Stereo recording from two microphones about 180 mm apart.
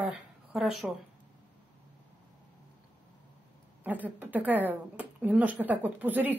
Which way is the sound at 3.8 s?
10° right (ahead or behind).